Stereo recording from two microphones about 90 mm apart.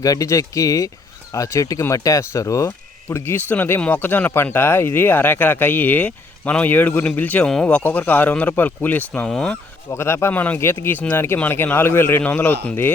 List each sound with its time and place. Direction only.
0.0 s speech: 40° left (ahead or behind)
3.5 s a man's voice: 20° left (ahead or behind)
9.9 s speech: 30° left (ahead or behind)